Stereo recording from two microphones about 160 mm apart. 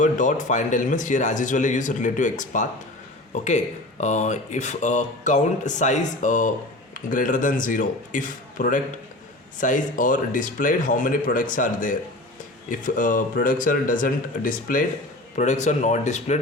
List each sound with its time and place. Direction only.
0.0 s a man's voice: 50° left (ahead or behind)